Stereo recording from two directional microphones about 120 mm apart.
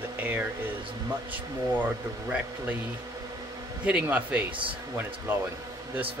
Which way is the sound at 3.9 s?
15° right (ahead or behind).